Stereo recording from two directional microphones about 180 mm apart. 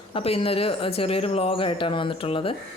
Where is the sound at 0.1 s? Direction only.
30° left (ahead or behind).